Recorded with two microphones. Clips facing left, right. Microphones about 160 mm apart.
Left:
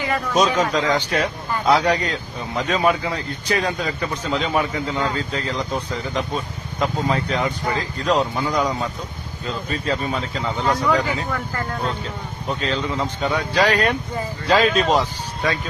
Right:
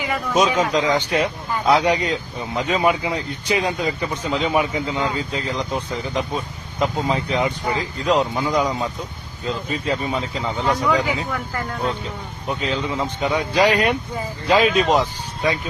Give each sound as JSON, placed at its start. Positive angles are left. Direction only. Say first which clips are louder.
{"t": 0.0, "sound": "a man's voice", "louder": "even", "side_deg": -10}
{"t": 9.6, "sound": "a man's voice", "louder": "left 1 dB", "side_deg": -15}
{"t": 10.7, "sound": "a man's voice", "louder": "even", "side_deg": 0}